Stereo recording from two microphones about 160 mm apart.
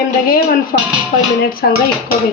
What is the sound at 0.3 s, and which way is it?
Speech, 65° left (ahead or behind).